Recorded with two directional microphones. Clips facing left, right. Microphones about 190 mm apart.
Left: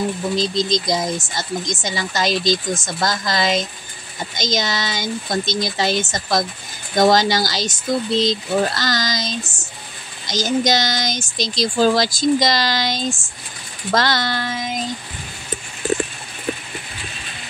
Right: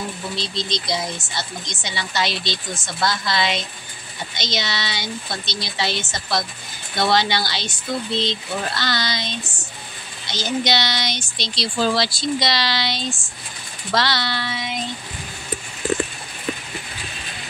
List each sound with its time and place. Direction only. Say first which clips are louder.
0.4 s speech: left 7 dB; 45° left (ahead or behind)